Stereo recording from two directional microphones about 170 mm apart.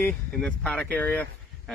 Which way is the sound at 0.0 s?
5° left (ahead or behind).